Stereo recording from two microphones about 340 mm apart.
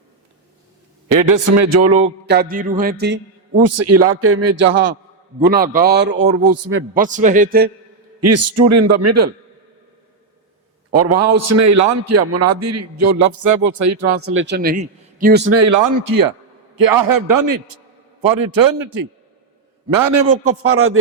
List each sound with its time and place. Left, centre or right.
1.1 s a man's voice: right
1.9 s a man's voice: right
3.7 s a man's voice: right
5.4 s a man's voice: right
7.0 s a man's voice: right
8.2 s a man's voice: right
10.9 s a man's voice: right
15.5 s a man's voice: right
20.6 s speech: right